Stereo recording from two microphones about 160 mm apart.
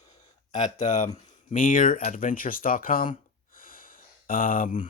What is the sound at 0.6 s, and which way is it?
Speech, 50° left (ahead or behind).